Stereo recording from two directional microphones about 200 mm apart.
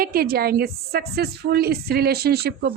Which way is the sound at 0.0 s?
50° right (ahead or behind).